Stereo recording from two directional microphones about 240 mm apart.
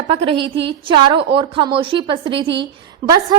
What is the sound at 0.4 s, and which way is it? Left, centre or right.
Speech, right.